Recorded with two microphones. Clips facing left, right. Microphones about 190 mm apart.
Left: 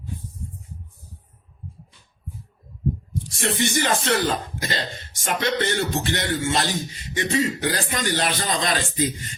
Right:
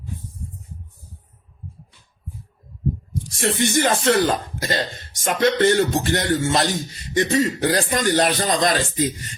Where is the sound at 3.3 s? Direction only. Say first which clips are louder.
Right 3 dB; 45° right (ahead or behind).